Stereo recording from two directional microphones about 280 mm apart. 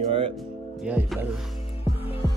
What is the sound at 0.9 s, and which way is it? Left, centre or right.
Music, centre.